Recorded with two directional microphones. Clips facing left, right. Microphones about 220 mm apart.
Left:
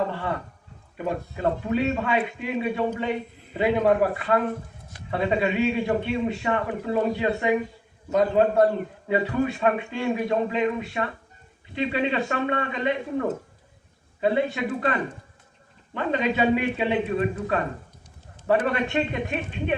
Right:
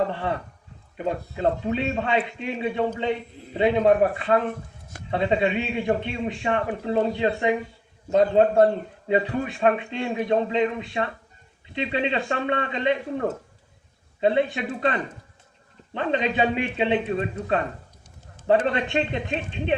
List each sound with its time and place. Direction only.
0.1 s a man's voice: 20° right (ahead or behind)